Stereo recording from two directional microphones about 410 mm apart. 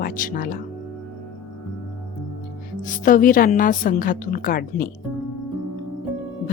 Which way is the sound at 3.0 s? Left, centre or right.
Centre.